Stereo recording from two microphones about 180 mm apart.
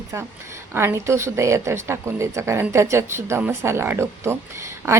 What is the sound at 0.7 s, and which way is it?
A woman's voice, 15° right (ahead or behind).